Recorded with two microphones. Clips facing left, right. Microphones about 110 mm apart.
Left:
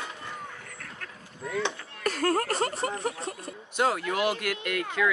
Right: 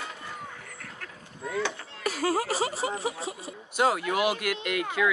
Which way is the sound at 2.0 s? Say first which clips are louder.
Left 1 dB; 5° right (ahead or behind).